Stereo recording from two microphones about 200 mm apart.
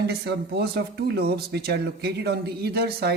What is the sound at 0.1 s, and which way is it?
Speech, 55° right (ahead or behind).